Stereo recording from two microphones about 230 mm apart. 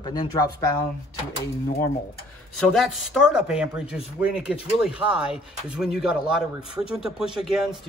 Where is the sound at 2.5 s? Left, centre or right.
Centre.